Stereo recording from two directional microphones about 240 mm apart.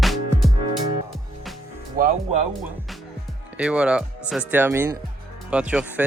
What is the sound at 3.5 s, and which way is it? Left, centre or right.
Speech, centre.